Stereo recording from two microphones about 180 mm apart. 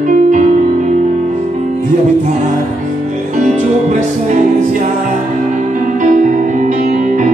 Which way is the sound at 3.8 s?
40° right (ahead or behind).